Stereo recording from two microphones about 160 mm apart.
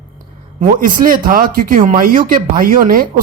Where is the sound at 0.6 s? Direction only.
55° right (ahead or behind).